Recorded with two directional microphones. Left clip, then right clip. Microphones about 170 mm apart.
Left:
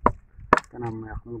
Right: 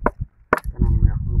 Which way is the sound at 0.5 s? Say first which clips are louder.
Left 1 dB; 15° right (ahead or behind).